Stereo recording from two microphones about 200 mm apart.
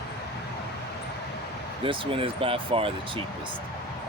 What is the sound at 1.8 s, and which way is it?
Speech, 25° right (ahead or behind).